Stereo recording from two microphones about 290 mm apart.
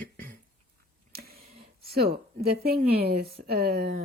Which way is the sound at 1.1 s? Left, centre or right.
Right.